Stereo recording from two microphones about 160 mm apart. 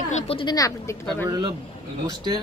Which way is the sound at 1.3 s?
30° right (ahead or behind).